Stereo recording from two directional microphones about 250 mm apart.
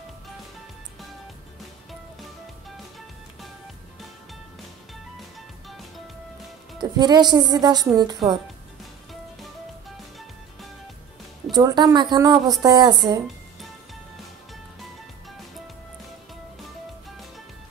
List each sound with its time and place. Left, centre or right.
6.8 s speech: centre
11.5 s speech: centre